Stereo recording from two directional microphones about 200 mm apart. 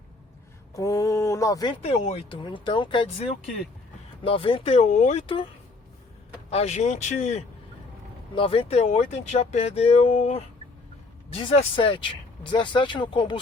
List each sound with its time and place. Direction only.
0.8 s a sound: 15° left (ahead or behind)
1.8 s speech: 30° left (ahead or behind)
6.5 s speech: 35° left (ahead or behind)